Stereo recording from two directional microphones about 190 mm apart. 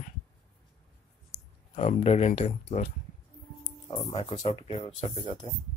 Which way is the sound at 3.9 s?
30° left (ahead or behind).